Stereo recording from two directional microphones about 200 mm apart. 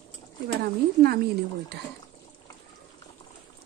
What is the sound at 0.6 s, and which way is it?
Speech, 50° right (ahead or behind).